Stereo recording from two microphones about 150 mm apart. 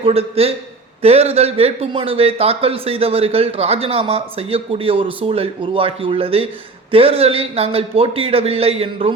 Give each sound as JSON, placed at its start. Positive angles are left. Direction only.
{"t": 0.0, "sound": "speech", "side_deg": -40}